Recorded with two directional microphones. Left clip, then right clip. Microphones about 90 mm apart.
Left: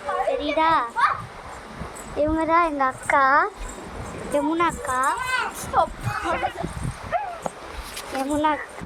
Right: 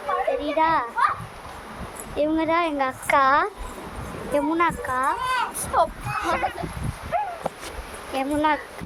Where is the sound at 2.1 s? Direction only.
15° right (ahead or behind).